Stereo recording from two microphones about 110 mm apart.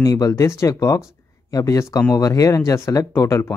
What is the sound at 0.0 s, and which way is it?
Speech, 35° left (ahead or behind).